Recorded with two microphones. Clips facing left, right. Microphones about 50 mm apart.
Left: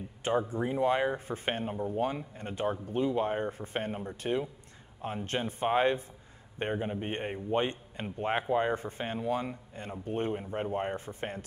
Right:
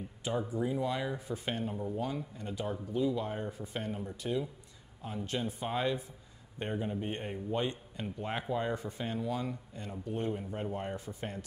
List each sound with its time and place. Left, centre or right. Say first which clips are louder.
0.2 s speech: left 4 dB; left